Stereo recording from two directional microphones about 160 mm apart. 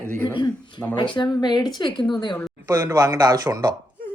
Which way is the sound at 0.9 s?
30° left (ahead or behind).